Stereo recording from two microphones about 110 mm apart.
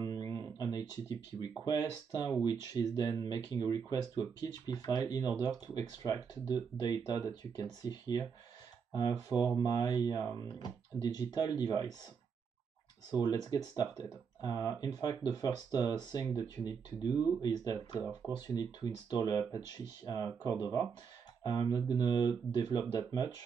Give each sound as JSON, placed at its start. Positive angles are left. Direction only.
{"t": 0.1, "sound": "speech", "side_deg": 30}
{"t": 13.1, "sound": "speech", "side_deg": 40}